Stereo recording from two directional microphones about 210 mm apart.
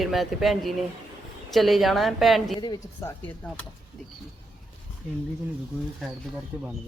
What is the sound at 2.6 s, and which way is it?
Speech, 20° left (ahead or behind).